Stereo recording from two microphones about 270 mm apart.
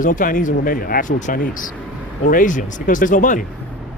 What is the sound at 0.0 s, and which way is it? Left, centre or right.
Speech, left.